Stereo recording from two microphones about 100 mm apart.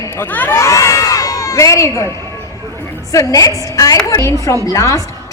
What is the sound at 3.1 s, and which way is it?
A woman's voice, 35° left (ahead or behind).